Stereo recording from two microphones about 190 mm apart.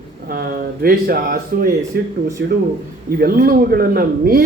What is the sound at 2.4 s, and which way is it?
Speech, 65° right (ahead or behind).